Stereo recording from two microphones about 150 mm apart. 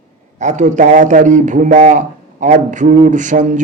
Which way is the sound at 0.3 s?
55° right (ahead or behind).